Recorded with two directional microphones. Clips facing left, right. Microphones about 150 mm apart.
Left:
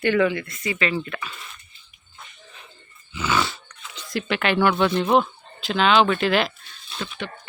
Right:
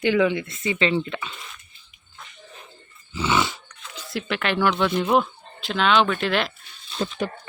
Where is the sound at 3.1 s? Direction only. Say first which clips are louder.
Right 1 dB; 25° right (ahead or behind).